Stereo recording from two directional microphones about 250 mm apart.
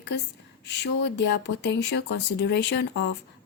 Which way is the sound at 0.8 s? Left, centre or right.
Left.